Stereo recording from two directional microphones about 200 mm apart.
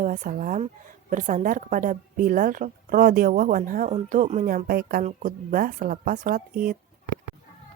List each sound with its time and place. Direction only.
0.0 s a woman's voice: 40° right (ahead or behind)